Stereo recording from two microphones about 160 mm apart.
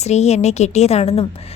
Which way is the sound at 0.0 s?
45° left (ahead or behind).